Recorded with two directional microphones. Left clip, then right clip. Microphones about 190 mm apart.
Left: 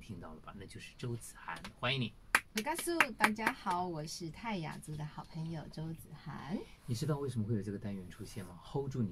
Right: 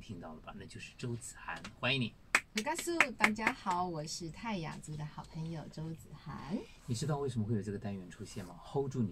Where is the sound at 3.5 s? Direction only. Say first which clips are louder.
Right 1 dB; centre (ahead or behind).